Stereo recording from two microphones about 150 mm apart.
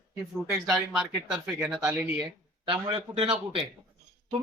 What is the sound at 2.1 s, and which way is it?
A woman's voice, 30° right (ahead or behind).